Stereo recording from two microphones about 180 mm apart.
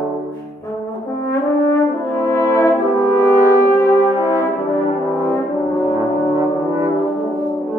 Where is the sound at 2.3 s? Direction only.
15° left (ahead or behind).